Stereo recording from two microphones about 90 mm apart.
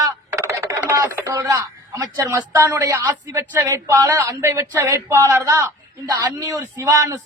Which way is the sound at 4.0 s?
45° right (ahead or behind).